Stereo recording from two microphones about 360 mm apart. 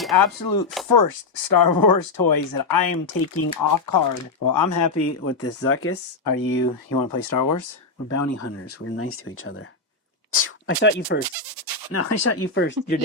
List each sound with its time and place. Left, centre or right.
0.2 s speech: left
6.2 s speech: left
11.5 s bleat: right
11.9 s speech: left